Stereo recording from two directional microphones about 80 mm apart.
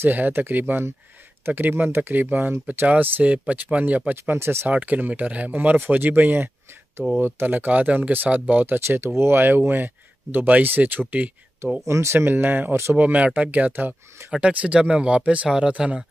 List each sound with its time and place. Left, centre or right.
0.0 s speech: right
2.9 s speech: centre
4.7 s speech: centre
11.8 s speech: right
12.9 s speech: centre